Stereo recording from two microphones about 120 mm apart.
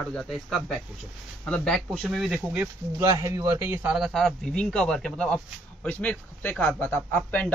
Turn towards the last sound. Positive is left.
turn(degrees=15)  # may be behind; listen again after turning